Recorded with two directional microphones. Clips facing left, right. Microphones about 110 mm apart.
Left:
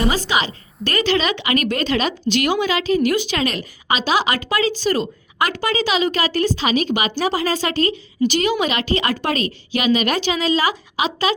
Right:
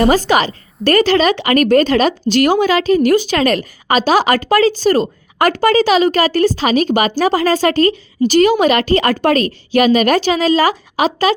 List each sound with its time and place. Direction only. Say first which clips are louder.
0.1 s a woman's voice: right 8 dB; 55° right (ahead or behind)